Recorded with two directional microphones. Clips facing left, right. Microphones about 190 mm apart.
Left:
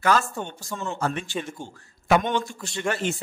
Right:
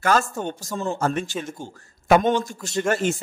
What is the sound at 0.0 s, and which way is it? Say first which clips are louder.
A man's voice: right 2 dB; 45° right (ahead or behind).